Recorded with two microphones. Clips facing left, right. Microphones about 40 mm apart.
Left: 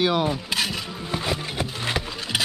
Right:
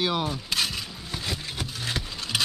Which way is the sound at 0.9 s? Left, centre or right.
Left.